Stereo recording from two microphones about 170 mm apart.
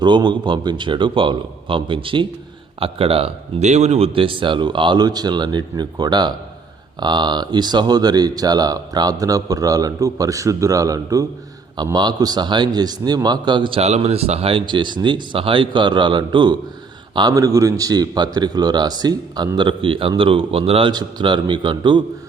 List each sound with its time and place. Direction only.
0.0 s a man's voice: 25° right (ahead or behind)